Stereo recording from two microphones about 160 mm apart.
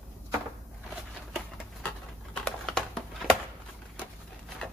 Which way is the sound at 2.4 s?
5° left (ahead or behind).